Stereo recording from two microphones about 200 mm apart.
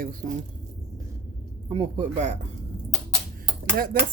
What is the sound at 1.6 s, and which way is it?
Speech, 30° right (ahead or behind).